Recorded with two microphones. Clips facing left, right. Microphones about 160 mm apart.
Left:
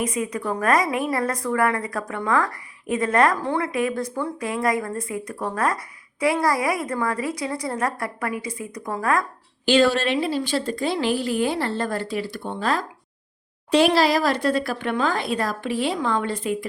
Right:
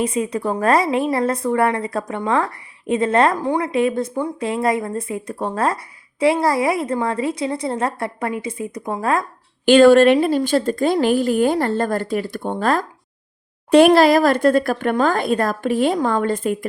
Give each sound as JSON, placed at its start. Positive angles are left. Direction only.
{"t": 0.0, "sound": "speech", "side_deg": -30}
{"t": 9.6, "sound": "a woman's voice", "side_deg": -55}